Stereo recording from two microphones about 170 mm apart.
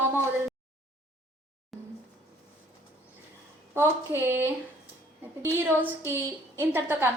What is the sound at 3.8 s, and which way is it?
A woman's voice, 15° right (ahead or behind).